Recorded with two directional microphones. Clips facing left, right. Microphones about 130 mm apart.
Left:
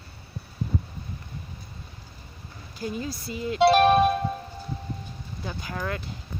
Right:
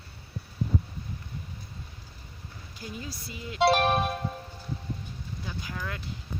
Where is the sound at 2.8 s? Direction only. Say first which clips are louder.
Left 8 dB; 40° left (ahead or behind).